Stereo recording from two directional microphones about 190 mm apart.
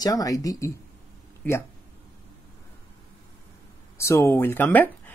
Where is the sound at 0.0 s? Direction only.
20° left (ahead or behind).